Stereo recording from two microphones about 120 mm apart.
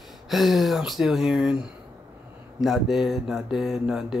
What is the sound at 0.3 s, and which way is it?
Speech, centre (ahead or behind).